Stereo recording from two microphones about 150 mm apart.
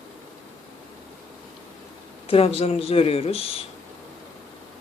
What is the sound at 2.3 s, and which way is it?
Speech, 40° left (ahead or behind).